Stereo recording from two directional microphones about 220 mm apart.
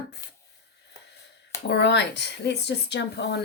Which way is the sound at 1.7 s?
50° left (ahead or behind).